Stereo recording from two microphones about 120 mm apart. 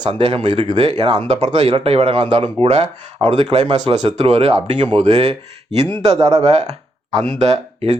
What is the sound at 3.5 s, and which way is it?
Speech, 65° right (ahead or behind).